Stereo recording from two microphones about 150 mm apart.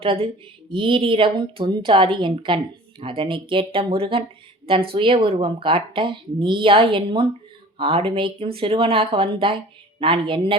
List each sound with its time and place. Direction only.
0.0 s speech: 40° right (ahead or behind)